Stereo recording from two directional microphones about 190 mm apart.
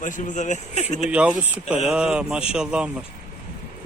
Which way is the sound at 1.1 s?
5° right (ahead or behind).